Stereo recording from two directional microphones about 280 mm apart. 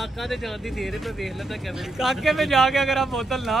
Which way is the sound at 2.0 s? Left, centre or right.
Centre.